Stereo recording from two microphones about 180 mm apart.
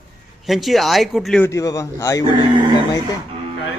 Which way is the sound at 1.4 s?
15° left (ahead or behind).